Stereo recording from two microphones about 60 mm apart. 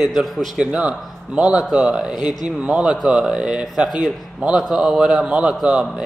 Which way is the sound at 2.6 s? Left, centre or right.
Centre.